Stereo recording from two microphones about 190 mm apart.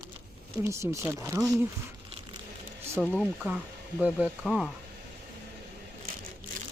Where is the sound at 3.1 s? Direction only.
10° right (ahead or behind).